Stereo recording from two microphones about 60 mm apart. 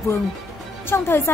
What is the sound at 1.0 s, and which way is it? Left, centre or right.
Speech, left.